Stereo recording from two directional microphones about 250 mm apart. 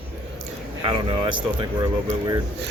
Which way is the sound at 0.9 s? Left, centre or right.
Centre.